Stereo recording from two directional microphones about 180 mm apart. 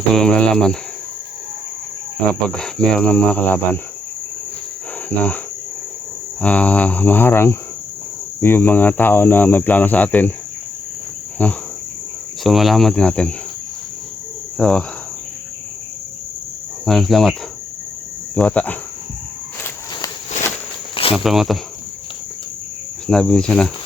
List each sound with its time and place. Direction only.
0.1 s speech: 5° left (ahead or behind)
2.5 s speech: 5° left (ahead or behind)
5.0 s speech: 10° left (ahead or behind)
6.4 s speech: 10° left (ahead or behind)
11.4 s speech: 10° left (ahead or behind)
14.6 s speech: 5° left (ahead or behind)
16.8 s speech: centre (ahead or behind)
18.3 s speech: 5° left (ahead or behind)
20.9 s cricket: 30° left (ahead or behind)
21.2 s speech: centre (ahead or behind)
23.0 s speech: 5° left (ahead or behind)